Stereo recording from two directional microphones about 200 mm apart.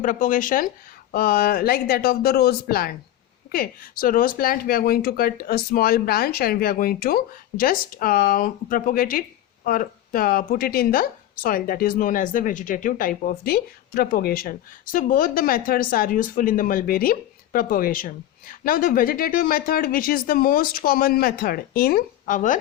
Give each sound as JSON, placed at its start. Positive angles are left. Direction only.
{"t": 0.0, "sound": "a woman's voice", "side_deg": 40}